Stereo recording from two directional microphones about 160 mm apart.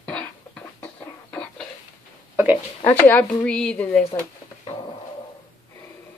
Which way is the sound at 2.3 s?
10° right (ahead or behind).